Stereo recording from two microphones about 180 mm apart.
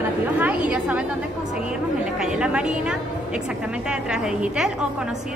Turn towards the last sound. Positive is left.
turn(degrees=-5)  # may be behind; listen again after turning